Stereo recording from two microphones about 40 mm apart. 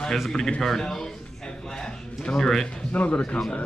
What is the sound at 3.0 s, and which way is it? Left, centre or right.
Speech, left.